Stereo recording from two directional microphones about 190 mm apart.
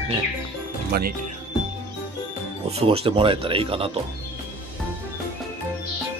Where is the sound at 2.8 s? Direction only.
30° right (ahead or behind).